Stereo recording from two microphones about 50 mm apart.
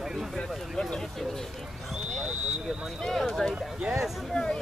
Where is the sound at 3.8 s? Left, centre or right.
Centre.